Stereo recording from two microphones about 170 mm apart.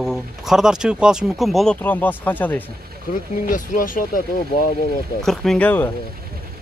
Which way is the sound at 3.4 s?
50° left (ahead or behind).